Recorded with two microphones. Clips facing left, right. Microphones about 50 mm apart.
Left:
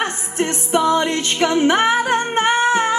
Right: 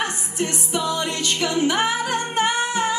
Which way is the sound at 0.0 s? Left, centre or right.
Left.